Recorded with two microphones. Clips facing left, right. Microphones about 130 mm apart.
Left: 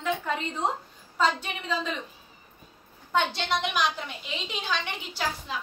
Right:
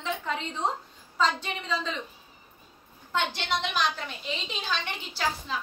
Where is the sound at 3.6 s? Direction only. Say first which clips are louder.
Left 1 dB; 15° left (ahead or behind).